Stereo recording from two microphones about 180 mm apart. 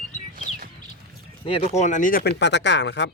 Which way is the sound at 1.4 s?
30° left (ahead or behind).